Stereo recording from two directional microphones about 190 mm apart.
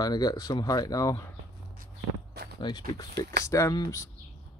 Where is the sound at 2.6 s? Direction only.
25° left (ahead or behind).